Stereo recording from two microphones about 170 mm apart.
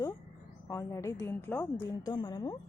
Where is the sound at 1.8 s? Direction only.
25° left (ahead or behind).